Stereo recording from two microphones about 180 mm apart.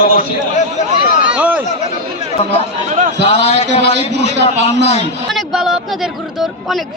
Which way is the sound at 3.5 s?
35° left (ahead or behind).